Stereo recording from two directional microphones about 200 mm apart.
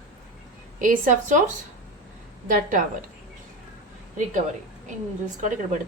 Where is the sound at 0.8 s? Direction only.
40° right (ahead or behind).